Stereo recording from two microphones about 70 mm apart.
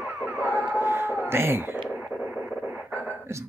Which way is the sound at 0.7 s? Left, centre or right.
Right.